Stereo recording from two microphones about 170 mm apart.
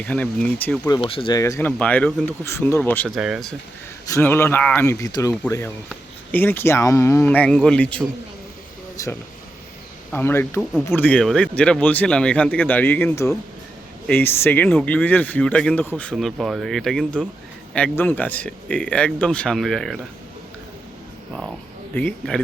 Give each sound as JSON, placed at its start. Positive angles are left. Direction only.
{"t": 0.0, "sound": "speech", "side_deg": 10}
{"t": 0.9, "sound": "speech", "side_deg": 30}
{"t": 1.4, "sound": "speech", "side_deg": 15}
{"t": 3.2, "sound": "speech", "side_deg": -5}
{"t": 4.1, "sound": "speech", "side_deg": 15}
{"t": 9.0, "sound": "speech", "side_deg": 20}
{"t": 21.9, "sound": "speech", "side_deg": 10}